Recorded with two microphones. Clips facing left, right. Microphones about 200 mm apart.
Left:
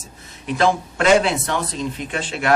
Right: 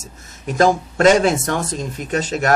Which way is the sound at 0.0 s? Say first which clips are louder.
Right 5 dB; 45° right (ahead or behind).